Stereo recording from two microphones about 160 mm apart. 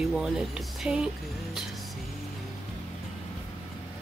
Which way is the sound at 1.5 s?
Centre (ahead or behind).